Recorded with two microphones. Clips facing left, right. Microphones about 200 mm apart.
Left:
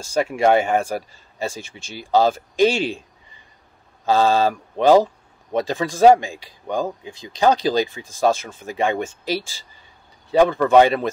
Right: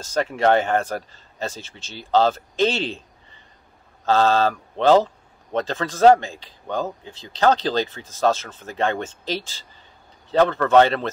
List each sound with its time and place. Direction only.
0.0 s speech: 10° left (ahead or behind)
4.0 s speech: 10° left (ahead or behind)